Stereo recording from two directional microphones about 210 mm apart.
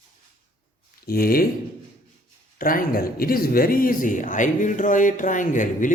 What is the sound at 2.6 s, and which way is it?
Speech, 40° left (ahead or behind).